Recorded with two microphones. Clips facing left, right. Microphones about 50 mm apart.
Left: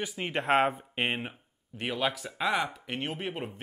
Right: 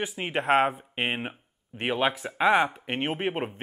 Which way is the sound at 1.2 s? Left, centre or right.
Right.